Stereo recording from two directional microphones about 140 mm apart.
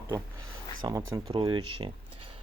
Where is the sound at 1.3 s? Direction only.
40° right (ahead or behind).